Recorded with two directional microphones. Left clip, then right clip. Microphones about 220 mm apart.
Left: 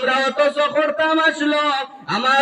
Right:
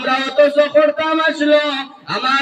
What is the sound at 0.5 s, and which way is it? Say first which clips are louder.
A man's voice: right 5 dB; 50° left (ahead or behind).